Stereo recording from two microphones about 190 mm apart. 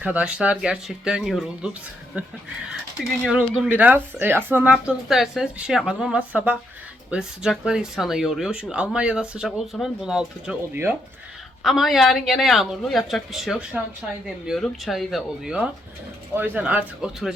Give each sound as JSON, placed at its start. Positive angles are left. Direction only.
{"t": 0.0, "sound": "speech", "side_deg": -5}